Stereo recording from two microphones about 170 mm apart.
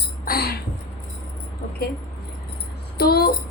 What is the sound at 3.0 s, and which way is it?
Speech, 65° left (ahead or behind).